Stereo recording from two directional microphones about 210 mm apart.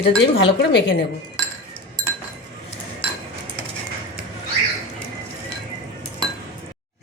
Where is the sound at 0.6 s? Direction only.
55° left (ahead or behind).